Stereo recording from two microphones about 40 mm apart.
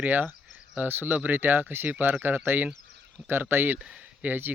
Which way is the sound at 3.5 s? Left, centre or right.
Right.